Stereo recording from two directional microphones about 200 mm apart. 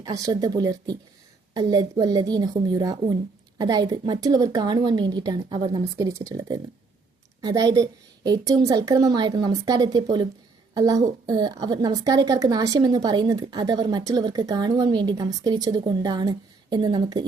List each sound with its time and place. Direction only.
0.0 s a woman's voice: 20° right (ahead or behind)